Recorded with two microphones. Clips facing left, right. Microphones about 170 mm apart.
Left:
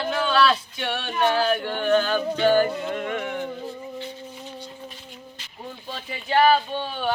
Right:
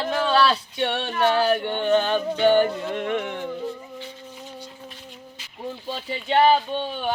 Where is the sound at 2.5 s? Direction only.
5° left (ahead or behind).